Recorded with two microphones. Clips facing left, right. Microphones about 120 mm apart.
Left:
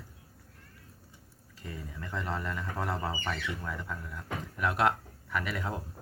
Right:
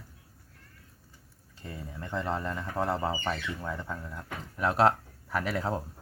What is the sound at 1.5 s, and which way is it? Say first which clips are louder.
Speech: right 1 dB; 30° right (ahead or behind).